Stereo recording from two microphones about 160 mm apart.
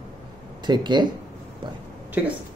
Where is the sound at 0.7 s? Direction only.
25° right (ahead or behind).